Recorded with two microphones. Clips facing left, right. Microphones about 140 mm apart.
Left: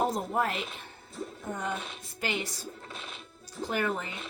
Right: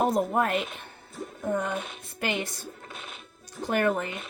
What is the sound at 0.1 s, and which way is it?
Speech, 55° right (ahead or behind).